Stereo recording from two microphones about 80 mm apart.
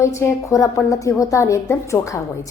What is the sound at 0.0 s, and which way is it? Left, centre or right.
A woman's voice, left.